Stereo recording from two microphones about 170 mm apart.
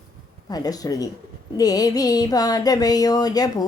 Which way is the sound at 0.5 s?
20° left (ahead or behind).